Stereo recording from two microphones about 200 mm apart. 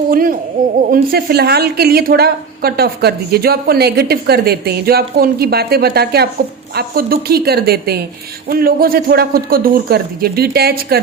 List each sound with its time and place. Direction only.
0.1 s a woman's voice: 45° right (ahead or behind)